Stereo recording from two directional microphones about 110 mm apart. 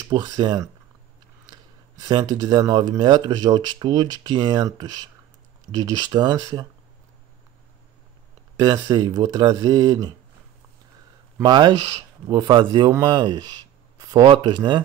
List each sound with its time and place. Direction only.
0.1 s speech: 40° right (ahead or behind)
8.5 s speech: 40° right (ahead or behind)
11.4 s speech: 40° right (ahead or behind)